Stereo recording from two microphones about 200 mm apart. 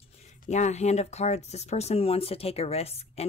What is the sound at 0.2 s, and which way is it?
Speech, 35° left (ahead or behind).